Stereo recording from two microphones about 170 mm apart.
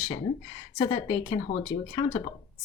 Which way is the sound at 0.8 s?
25° left (ahead or behind).